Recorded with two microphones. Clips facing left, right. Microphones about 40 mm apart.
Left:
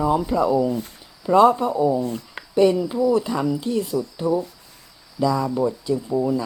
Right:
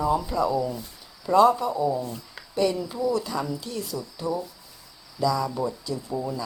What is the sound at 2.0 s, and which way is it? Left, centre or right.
Speech, left.